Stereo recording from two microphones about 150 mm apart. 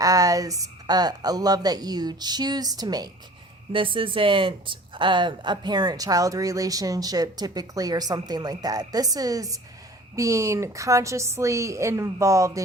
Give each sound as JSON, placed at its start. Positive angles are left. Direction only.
{"t": 0.0, "sound": "speech", "side_deg": -25}